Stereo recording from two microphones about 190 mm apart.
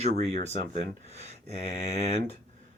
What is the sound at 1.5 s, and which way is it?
Mantra, 30° left (ahead or behind).